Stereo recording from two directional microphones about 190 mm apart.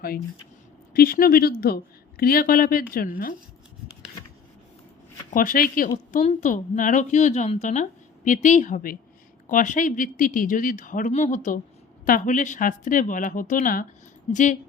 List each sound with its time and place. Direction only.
0.9 s speech: 50° left (ahead or behind)
5.3 s a woman's voice: 45° left (ahead or behind)